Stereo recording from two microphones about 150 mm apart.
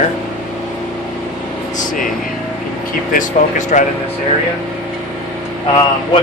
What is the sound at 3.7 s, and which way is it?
Speech, 60° left (ahead or behind).